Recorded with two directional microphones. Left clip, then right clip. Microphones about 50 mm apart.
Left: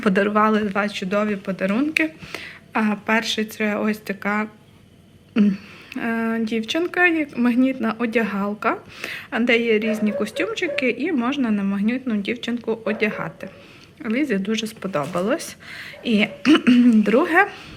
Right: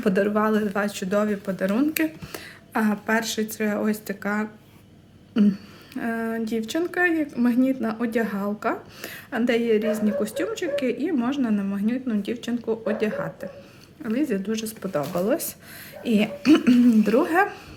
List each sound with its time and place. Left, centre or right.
0.0 s speech: centre
0.7 s a man's voice: right; by 15.3 s centre
15.3 s a woman's voice: right